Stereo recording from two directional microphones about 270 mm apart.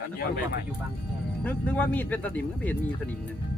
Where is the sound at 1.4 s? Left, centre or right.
Centre.